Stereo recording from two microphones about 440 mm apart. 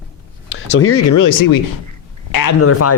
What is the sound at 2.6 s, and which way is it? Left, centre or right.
Speech, left.